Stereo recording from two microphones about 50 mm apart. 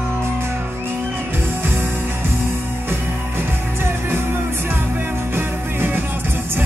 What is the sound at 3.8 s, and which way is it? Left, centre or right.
Music, right.